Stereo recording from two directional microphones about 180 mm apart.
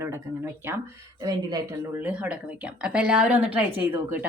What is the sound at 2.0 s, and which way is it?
A woman's voice, 5° right (ahead or behind).